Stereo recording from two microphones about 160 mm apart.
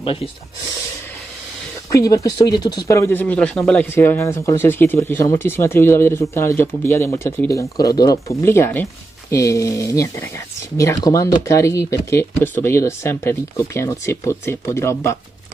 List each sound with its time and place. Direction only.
0.0 s speech: 35° left (ahead or behind)
1.9 s speech: 20° left (ahead or behind)